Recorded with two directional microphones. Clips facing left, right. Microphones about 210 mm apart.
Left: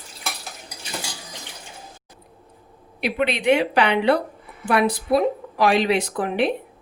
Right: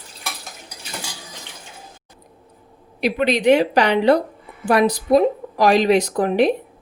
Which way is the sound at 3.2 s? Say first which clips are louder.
Right 4 dB; 40° right (ahead or behind).